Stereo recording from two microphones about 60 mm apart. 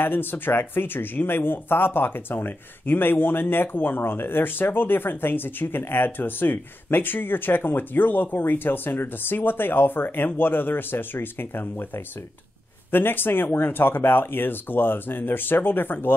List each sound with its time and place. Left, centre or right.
0.0 s speech: left